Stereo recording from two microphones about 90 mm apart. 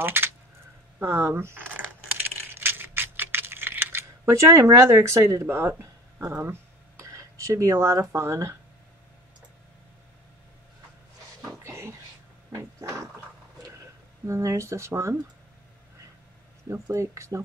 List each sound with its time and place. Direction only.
0.0 s speech: 25° right (ahead or behind)
2.2 s typing: 25° right (ahead or behind)
7.0 s a sound: 35° right (ahead or behind)
8.0 s speech: 30° right (ahead or behind)
11.6 s a sound: 30° right (ahead or behind)
14.2 s speech: 35° right (ahead or behind)
16.6 s speech: 35° right (ahead or behind)